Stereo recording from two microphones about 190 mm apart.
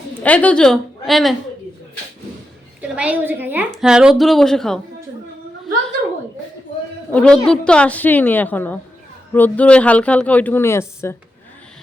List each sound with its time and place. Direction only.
0.2 s a woman's voice: 5° left (ahead or behind)
2.8 s a woman's voice: 5° right (ahead or behind)
7.1 s speech: 5° left (ahead or behind)